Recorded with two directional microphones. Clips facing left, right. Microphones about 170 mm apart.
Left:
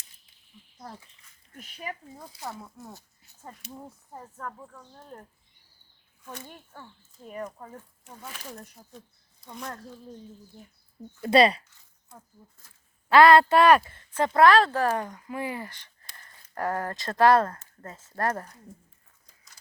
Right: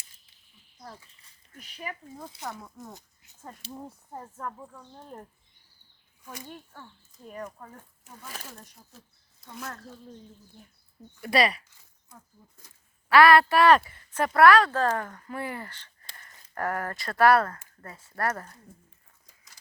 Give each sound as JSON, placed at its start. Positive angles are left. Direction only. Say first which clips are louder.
{"t": 1.5, "sound": "speech", "louder": "left 1 dB", "side_deg": 40}
{"t": 2.3, "sound": "speech", "louder": "left 2 dB", "side_deg": -20}
{"t": 3.6, "sound": "speech", "louder": "right 2 dB", "side_deg": -30}
{"t": 4.1, "sound": "a woman's voice", "louder": "right 1 dB", "side_deg": -10}
{"t": 6.2, "sound": "speech", "louder": "left 1 dB", "side_deg": -10}
{"t": 8.9, "sound": "speech", "louder": "left 7 dB", "side_deg": -5}
{"t": 11.2, "sound": "speech", "louder": "left 5 dB", "side_deg": 25}
{"t": 13.1, "sound": "speech", "louder": "left 2 dB", "side_deg": 20}